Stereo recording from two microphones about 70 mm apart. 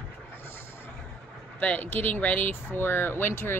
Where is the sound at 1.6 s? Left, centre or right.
Left.